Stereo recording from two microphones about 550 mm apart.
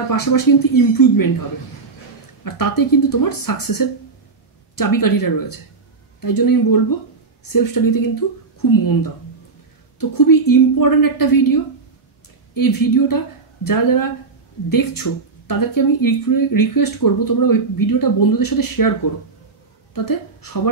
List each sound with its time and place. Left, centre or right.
0.1 s speech: left
2.4 s a woman's voice: left